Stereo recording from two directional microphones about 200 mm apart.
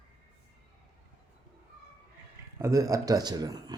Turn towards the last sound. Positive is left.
turn(degrees=-20)  # may be behind; listen again after turning